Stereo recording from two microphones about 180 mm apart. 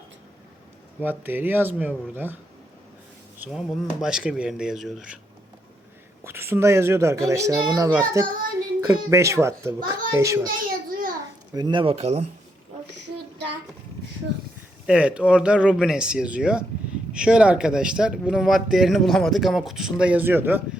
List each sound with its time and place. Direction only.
0.9 s a child's voice: 10° right (ahead or behind)
3.4 s speech: 5° right (ahead or behind)
6.2 s a child's voice: 15° right (ahead or behind)
10.4 s a sound: 50° right (ahead or behind)
11.5 s speech: 25° right (ahead or behind)
14.8 s speech: 5° right (ahead or behind)